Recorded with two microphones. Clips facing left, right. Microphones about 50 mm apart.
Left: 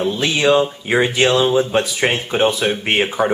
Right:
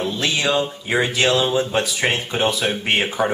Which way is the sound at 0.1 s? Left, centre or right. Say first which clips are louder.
Left 7 dB; left.